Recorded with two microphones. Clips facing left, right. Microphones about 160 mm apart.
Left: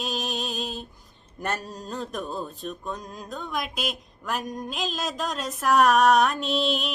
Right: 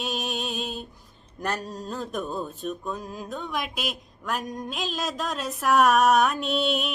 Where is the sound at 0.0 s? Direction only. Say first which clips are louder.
Even; centre (ahead or behind).